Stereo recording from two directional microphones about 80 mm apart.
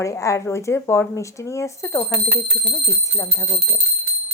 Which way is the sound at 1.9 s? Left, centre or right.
Left.